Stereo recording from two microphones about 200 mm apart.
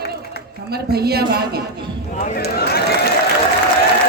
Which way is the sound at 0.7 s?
50° right (ahead or behind).